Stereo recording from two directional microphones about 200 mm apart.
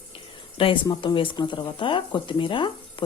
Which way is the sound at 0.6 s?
25° left (ahead or behind).